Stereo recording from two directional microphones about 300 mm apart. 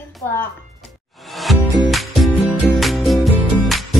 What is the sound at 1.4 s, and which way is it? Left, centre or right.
Music, centre.